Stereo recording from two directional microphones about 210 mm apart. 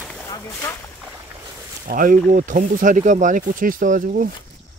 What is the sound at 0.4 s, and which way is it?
Speech, 10° left (ahead or behind).